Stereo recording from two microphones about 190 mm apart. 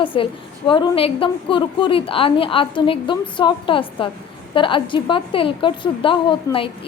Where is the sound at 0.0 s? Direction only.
25° left (ahead or behind).